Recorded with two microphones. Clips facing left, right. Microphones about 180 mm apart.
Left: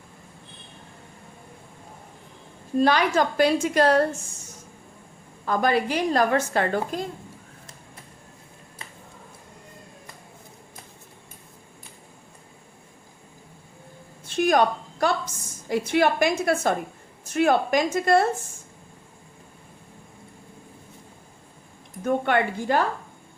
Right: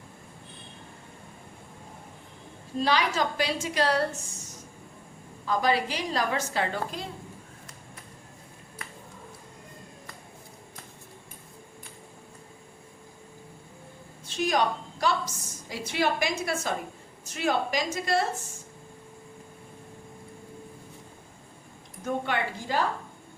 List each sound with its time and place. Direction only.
2.7 s a woman's voice: 50° left (ahead or behind)
5.5 s a woman's voice: 55° left (ahead or behind)
14.3 s a sound: 55° left (ahead or behind)
15.9 s a woman's voice: 55° left (ahead or behind)
22.0 s a woman's voice: 55° left (ahead or behind)